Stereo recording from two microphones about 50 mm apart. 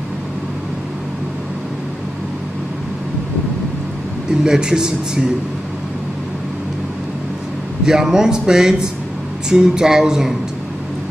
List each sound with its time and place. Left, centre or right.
4.3 s speech: centre
7.8 s speech: centre